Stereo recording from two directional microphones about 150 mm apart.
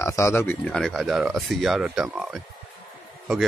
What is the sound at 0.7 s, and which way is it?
Speech, 5° left (ahead or behind).